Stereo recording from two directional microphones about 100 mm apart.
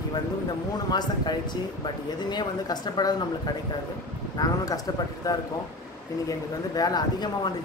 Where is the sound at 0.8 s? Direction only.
45° left (ahead or behind).